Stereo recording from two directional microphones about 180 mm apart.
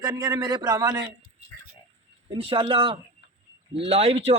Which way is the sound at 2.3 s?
30° right (ahead or behind).